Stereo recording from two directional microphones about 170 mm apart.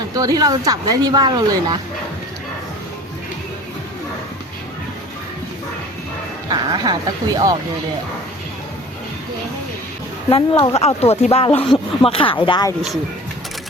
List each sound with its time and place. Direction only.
0.2 s speech: 20° right (ahead or behind)
6.5 s speech: 25° right (ahead or behind)
10.2 s speech: 30° left (ahead or behind)